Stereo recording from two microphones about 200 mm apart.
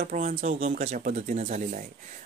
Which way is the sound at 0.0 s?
40° right (ahead or behind).